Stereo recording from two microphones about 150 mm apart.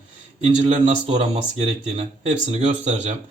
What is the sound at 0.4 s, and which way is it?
Speech, 45° right (ahead or behind).